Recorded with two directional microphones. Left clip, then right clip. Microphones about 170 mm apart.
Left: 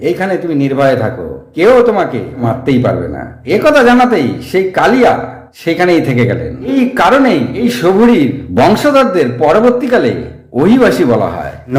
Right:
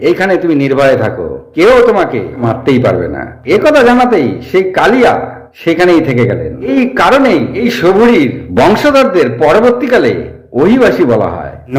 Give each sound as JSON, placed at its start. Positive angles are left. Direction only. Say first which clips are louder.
{"t": 0.0, "sound": "a man's voice", "louder": "right 4 dB", "side_deg": 5}